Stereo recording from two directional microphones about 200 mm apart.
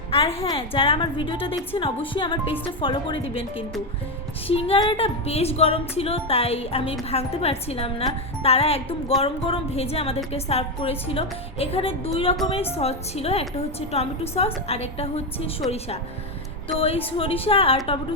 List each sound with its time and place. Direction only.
0.1 s a woman's voice: 30° left (ahead or behind)
4.4 s a woman's voice: 30° left (ahead or behind)
16.7 s a woman's voice: 30° left (ahead or behind)